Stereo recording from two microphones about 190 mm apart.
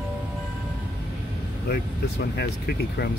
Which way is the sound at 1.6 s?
60° left (ahead or behind).